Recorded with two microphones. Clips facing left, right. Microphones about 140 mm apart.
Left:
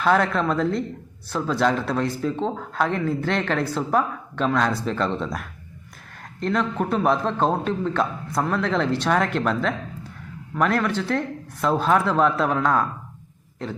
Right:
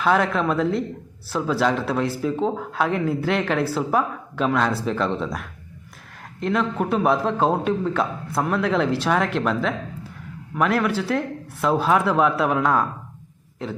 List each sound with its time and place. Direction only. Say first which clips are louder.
0.0 s speech: even; 5° right (ahead or behind)